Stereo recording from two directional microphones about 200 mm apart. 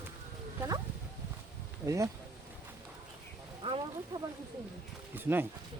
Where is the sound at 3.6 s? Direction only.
30° right (ahead or behind).